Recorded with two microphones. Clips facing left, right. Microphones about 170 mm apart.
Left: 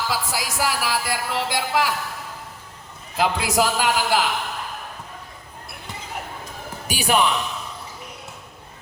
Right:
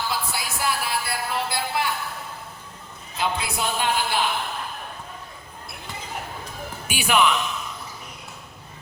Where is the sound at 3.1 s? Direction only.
90° left.